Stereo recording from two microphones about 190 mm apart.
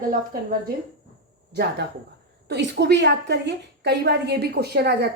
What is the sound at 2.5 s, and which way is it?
A woman's voice, 65° right (ahead or behind).